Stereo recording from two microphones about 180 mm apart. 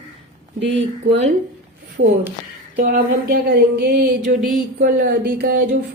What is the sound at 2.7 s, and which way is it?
Speech, 55° right (ahead or behind).